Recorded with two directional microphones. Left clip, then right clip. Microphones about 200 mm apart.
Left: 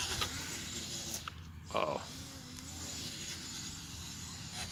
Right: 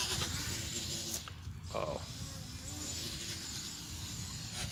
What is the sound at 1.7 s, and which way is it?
Mechanisms, 40° left (ahead or behind).